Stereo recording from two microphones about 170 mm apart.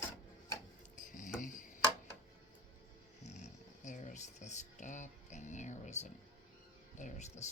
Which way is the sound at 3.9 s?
45° left (ahead or behind).